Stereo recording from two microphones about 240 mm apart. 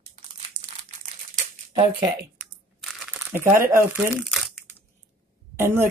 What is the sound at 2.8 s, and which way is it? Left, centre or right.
Crumpling, centre.